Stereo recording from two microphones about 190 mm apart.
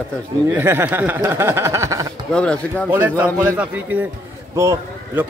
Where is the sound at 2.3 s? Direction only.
5° left (ahead or behind).